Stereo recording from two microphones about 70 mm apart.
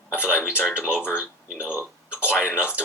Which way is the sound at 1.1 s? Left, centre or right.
Centre.